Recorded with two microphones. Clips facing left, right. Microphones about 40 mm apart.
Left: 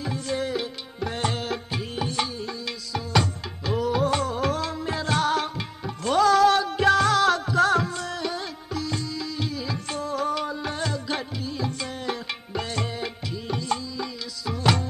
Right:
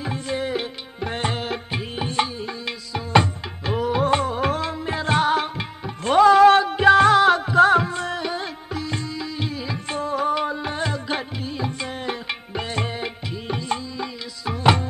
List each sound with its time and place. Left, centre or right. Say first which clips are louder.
0.0 s music: right 2 dB; right